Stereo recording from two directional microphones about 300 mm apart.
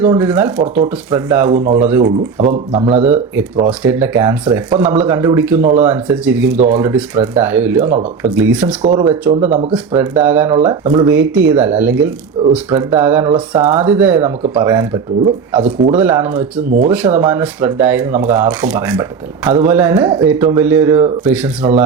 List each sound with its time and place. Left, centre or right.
0.0 s speech: centre
1.5 s speech: right
1.9 s speech: centre
2.4 s speech: right
3.7 s speech: centre
5.6 s speech: right
5.9 s speech: centre
21.6 s speech: centre